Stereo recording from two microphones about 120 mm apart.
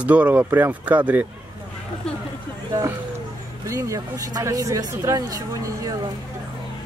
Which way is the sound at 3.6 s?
25° right (ahead or behind).